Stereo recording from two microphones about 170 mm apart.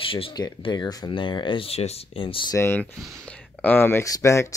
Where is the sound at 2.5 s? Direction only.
15° left (ahead or behind).